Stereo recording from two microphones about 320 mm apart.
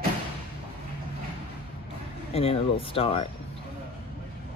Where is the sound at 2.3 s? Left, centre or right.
Centre.